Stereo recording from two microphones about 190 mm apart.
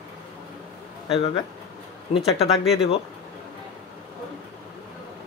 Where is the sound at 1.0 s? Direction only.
30° left (ahead or behind).